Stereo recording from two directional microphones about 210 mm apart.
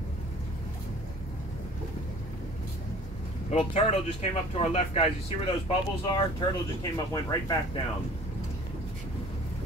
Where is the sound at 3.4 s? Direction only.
30° left (ahead or behind).